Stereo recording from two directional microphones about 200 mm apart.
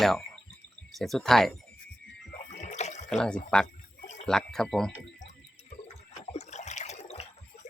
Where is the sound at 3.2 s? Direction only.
5° left (ahead or behind).